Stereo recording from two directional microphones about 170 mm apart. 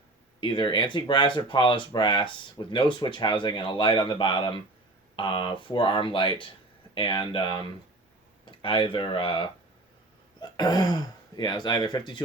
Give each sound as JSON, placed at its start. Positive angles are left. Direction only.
{"t": 0.3, "sound": "speech", "side_deg": 30}